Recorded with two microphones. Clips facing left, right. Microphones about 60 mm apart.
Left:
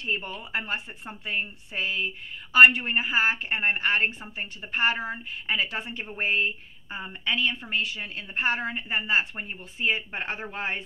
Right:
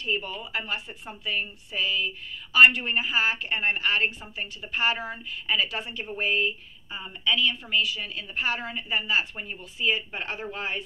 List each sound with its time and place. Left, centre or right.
0.4 s a woman's voice: left